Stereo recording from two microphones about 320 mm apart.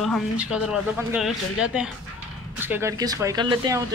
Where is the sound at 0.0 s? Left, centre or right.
Centre.